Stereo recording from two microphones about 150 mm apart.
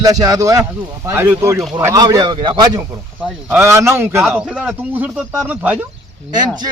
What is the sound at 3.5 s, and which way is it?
Speech, 20° right (ahead or behind).